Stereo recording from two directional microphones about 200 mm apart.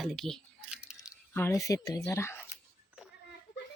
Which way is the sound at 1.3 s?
10° left (ahead or behind).